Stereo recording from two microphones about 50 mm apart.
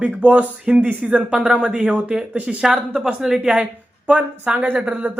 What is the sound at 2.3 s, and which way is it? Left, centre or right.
Speech, right.